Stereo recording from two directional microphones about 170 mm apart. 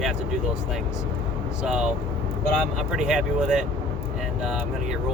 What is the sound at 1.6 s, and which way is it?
Speech, 5° right (ahead or behind).